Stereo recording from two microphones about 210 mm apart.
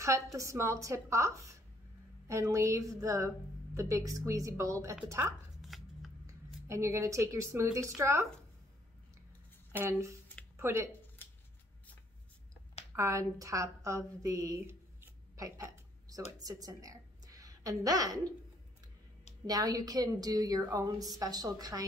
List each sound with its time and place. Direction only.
0.0 s a woman's voice: 15° right (ahead or behind)
5.6 s chopping: centre (ahead or behind)
6.2 s a woman's voice: 15° right (ahead or behind)
9.7 s speech: 10° right (ahead or behind)
12.9 s a woman's voice: 15° right (ahead or behind)
19.4 s a woman's voice: 15° right (ahead or behind)